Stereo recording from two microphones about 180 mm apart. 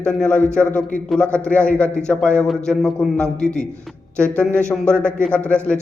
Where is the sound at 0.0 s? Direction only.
5° left (ahead or behind).